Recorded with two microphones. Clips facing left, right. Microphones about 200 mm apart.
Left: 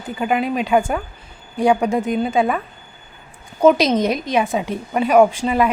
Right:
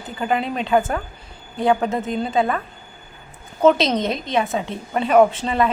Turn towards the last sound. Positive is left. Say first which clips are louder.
# left 2 dB
turn(degrees=10)  # may be behind; listen again after turning